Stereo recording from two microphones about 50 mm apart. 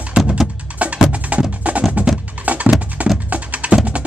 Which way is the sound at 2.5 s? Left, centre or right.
Right.